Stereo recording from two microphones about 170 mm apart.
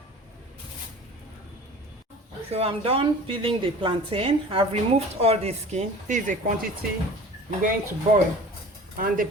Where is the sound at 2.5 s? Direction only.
35° right (ahead or behind).